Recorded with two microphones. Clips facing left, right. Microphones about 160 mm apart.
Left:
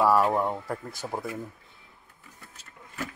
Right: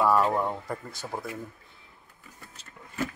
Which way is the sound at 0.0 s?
5° left (ahead or behind).